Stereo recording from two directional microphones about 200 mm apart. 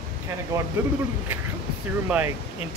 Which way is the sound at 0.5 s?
15° right (ahead or behind).